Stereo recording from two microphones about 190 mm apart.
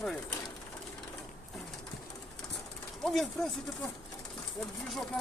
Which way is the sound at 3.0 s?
Centre (ahead or behind).